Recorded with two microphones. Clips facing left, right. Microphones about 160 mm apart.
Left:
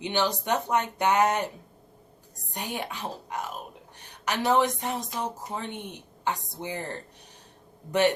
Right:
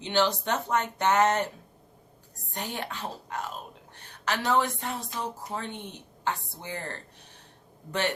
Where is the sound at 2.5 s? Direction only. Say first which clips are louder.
Left 1 dB; 15° left (ahead or behind).